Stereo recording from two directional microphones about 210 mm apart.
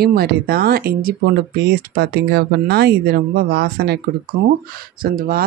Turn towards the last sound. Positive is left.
turn(degrees=-45)  # may be behind; listen again after turning